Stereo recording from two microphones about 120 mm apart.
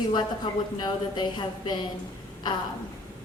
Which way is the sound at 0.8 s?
40° left (ahead or behind).